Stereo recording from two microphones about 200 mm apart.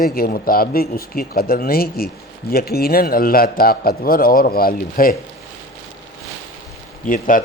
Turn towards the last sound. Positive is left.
turn(degrees=40)  # may be behind; listen again after turning